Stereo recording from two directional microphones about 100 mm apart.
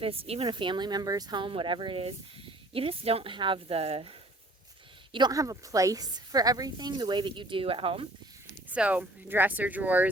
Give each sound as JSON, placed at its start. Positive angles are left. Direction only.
{"t": 0.0, "sound": "speech", "side_deg": -70}
{"t": 0.5, "sound": "speech", "side_deg": -55}
{"t": 5.3, "sound": "speech", "side_deg": -35}
{"t": 8.7, "sound": "speech", "side_deg": -15}